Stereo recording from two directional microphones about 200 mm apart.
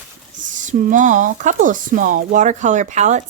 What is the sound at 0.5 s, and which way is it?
A woman's voice, 40° right (ahead or behind).